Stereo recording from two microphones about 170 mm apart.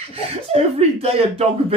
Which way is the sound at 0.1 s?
35° right (ahead or behind).